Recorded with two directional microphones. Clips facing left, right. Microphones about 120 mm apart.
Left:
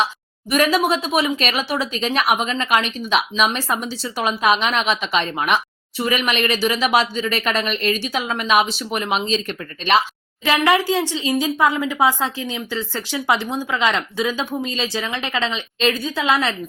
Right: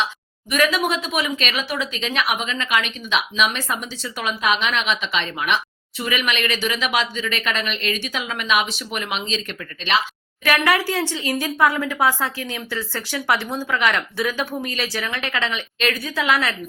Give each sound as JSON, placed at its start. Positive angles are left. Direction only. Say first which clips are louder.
{"t": 0.5, "sound": "speech", "louder": "left 3 dB", "side_deg": 35}
{"t": 10.4, "sound": "a woman's voice", "louder": "left 2 dB", "side_deg": 20}